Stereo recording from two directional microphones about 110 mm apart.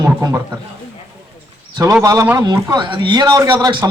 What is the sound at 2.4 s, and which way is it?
Speech, 35° right (ahead or behind).